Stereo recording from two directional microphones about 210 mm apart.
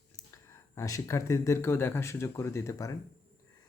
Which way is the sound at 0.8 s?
15° left (ahead or behind).